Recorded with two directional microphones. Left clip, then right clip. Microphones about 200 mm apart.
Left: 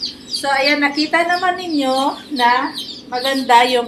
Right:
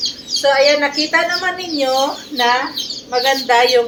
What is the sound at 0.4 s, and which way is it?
A woman's voice, 15° left (ahead or behind).